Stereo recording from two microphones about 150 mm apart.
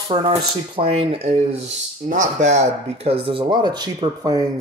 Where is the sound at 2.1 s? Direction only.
55° right (ahead or behind).